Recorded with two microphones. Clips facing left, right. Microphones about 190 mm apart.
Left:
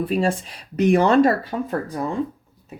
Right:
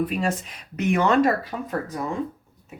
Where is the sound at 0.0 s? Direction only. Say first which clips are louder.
Left 3 dB; 30° left (ahead or behind).